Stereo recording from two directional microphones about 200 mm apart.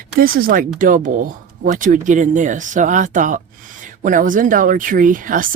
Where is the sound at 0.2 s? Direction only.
45° right (ahead or behind).